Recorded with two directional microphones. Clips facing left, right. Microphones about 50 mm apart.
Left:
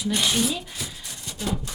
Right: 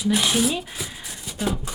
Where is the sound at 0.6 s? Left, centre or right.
Centre.